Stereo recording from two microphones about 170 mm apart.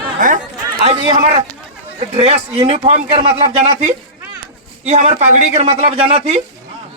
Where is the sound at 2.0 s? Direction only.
35° right (ahead or behind).